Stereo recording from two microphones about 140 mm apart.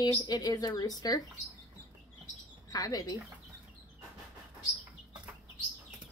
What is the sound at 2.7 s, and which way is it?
Speech, 25° left (ahead or behind).